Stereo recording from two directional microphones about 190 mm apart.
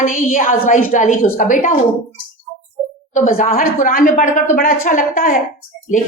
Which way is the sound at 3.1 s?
45° left (ahead or behind).